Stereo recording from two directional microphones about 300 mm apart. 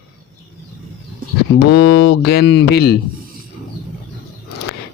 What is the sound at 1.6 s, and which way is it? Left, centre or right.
Speech, left.